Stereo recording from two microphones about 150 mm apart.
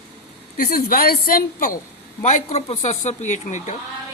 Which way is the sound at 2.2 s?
50° left (ahead or behind).